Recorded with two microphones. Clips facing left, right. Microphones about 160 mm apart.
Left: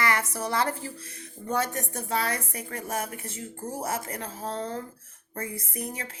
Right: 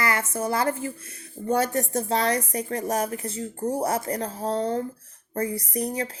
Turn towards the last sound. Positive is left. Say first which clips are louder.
# right 8 dB
turn(degrees=-35)  # may be behind; listen again after turning